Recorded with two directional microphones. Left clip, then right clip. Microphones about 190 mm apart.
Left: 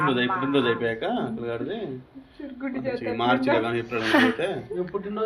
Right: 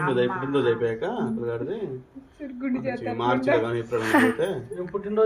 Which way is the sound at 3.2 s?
5° left (ahead or behind).